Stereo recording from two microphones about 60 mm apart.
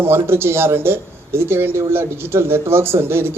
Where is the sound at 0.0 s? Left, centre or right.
Right.